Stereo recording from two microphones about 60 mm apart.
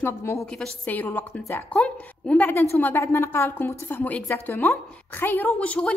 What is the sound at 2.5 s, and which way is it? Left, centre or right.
Speech, left.